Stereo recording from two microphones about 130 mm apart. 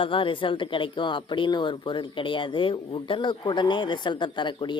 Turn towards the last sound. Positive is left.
turn(degrees=35)  # may be behind; listen again after turning